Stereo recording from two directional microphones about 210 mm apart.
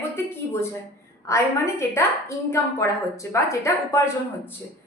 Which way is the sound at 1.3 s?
15° left (ahead or behind).